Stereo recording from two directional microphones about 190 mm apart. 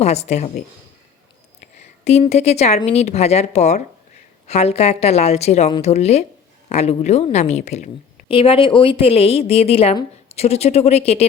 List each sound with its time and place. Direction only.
0.0 s a woman's voice: 35° left (ahead or behind)
2.0 s a woman's voice: 35° left (ahead or behind)